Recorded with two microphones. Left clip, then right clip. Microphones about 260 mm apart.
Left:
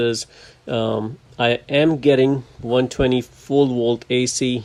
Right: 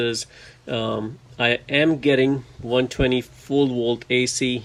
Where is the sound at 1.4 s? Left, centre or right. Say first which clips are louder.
Left 2 dB; centre.